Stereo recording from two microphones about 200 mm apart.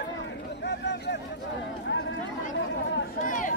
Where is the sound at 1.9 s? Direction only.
65° left (ahead or behind).